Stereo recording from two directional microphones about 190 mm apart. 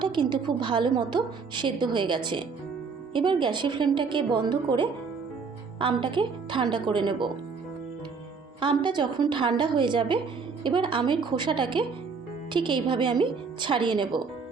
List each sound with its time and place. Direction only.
0.0 s a woman's voice: 25° right (ahead or behind)
8.6 s a woman's voice: 25° right (ahead or behind)